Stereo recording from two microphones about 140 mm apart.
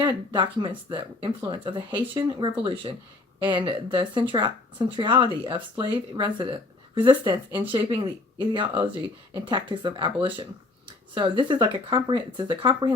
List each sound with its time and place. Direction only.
0.0 s speech: 30° right (ahead or behind)
11.1 s speech: 35° right (ahead or behind)